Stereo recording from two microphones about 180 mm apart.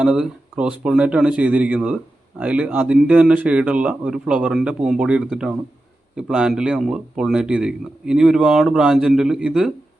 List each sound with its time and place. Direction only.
0.0 s a man's voice: 5° right (ahead or behind)